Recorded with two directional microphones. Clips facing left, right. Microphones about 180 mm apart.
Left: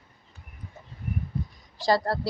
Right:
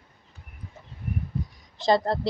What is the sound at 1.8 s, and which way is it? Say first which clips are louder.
Speech: right 2 dB; 20° right (ahead or behind).